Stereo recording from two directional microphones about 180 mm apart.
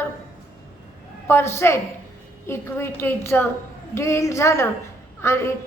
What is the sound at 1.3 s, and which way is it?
A woman's voice, 15° left (ahead or behind).